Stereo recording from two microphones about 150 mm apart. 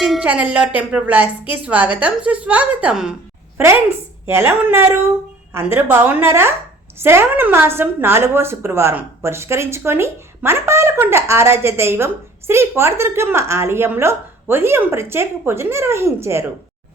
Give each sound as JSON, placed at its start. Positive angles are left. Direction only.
{"t": 0.0, "sound": "a woman's voice", "side_deg": -5}
{"t": 4.3, "sound": "a woman's voice", "side_deg": -15}